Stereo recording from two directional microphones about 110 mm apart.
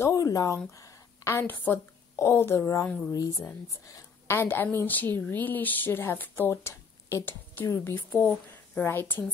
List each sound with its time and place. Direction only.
0.0 s a woman's voice: 25° left (ahead or behind)
3.8 s a woman's voice: 20° left (ahead or behind)